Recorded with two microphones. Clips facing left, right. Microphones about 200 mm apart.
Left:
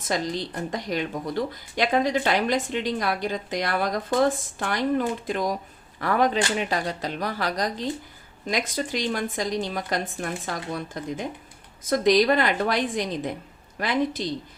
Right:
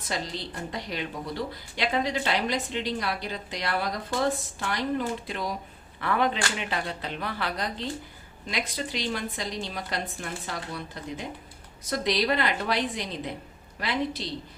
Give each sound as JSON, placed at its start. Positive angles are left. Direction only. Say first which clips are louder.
{"t": 0.1, "sound": "a woman's voice", "louder": "left 6 dB", "side_deg": 45}